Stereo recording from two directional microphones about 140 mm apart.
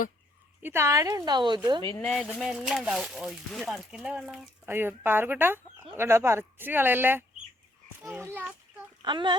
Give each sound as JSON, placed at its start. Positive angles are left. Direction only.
{"t": 0.6, "sound": "a woman's voice", "side_deg": -20}
{"t": 2.0, "sound": "speech", "side_deg": 5}
{"t": 4.6, "sound": "speech", "side_deg": -15}
{"t": 9.0, "sound": "speech", "side_deg": -35}